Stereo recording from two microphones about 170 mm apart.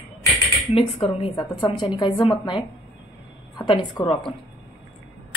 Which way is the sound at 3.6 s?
30° left (ahead or behind).